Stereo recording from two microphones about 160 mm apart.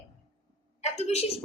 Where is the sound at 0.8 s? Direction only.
45° left (ahead or behind).